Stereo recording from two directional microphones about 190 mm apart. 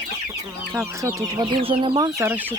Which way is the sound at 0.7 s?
15° right (ahead or behind).